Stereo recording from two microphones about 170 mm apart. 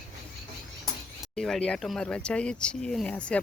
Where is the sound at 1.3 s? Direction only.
5° left (ahead or behind).